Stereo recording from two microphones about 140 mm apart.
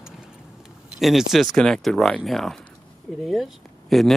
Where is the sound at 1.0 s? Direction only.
Centre (ahead or behind).